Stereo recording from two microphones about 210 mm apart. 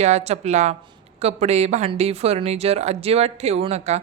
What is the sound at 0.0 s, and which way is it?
Speech, 30° right (ahead or behind).